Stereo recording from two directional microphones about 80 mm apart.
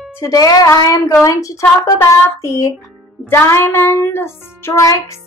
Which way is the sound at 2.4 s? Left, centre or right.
Left.